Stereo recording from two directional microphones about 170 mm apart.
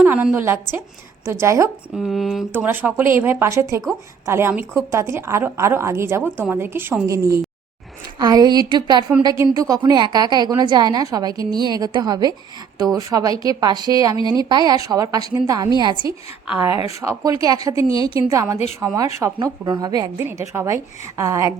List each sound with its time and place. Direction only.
0.0 s a woman's voice: 10° right (ahead or behind)
2.0 s speech: centre (ahead or behind)
2.5 s a woman's voice: 10° right (ahead or behind)
16.5 s a woman's voice: 10° right (ahead or behind)